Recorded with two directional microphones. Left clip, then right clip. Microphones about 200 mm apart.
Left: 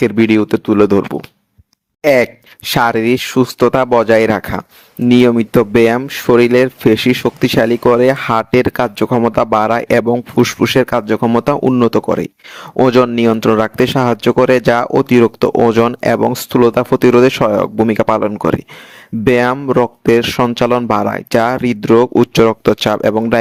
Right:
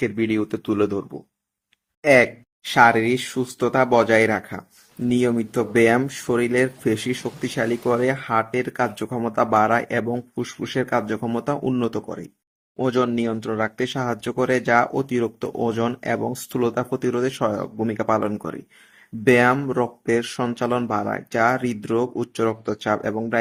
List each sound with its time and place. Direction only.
0.0 s speech: 50° left (ahead or behind)